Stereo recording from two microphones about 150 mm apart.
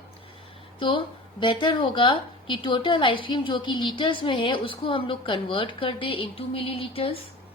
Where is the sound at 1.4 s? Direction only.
30° left (ahead or behind).